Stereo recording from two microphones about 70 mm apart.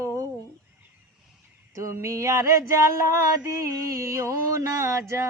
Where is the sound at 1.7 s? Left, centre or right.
Right.